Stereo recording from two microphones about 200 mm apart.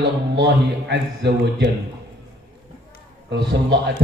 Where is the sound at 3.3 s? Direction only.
60° right (ahead or behind).